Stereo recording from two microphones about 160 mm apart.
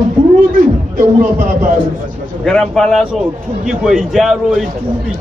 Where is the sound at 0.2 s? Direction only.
60° right (ahead or behind).